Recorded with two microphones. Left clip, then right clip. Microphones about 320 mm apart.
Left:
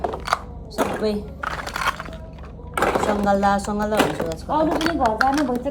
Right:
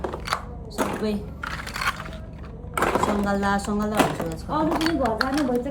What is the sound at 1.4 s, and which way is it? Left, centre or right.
Typing, centre.